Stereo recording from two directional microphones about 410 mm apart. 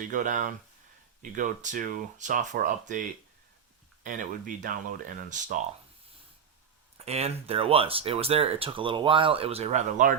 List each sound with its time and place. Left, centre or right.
0.0 s speech: centre
4.0 s speech: centre
7.0 s speech: centre